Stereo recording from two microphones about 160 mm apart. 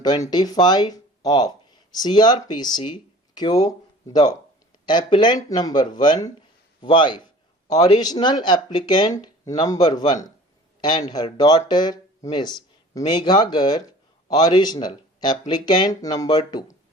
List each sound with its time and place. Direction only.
0.0 s speech: 25° left (ahead or behind)